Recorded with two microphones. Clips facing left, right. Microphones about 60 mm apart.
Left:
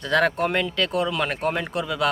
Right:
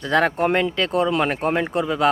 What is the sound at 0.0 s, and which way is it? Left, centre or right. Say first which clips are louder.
Speech: right 2 dB; centre.